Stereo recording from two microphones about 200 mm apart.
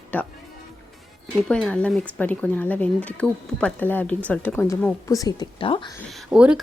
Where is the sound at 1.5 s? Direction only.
5° left (ahead or behind); by 5.8 s 25° left (ahead or behind).